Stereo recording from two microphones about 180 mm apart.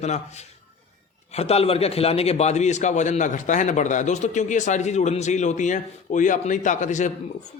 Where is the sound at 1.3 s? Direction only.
35° left (ahead or behind).